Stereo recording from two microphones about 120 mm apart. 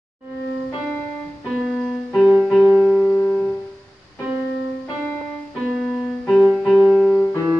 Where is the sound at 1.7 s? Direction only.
Centre (ahead or behind).